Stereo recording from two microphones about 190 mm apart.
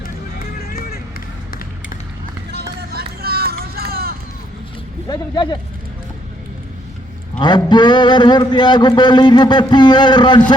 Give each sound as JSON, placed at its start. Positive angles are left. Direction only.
{"t": 0.3, "sound": "music", "side_deg": 50}
{"t": 2.5, "sound": "run", "side_deg": -60}
{"t": 5.0, "sound": "speech", "side_deg": 20}
{"t": 7.3, "sound": "speech", "side_deg": 25}